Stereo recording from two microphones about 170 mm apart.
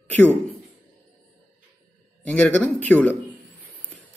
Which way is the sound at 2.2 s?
10° left (ahead or behind).